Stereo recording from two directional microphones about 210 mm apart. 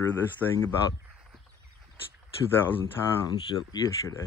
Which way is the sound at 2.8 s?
20° left (ahead or behind).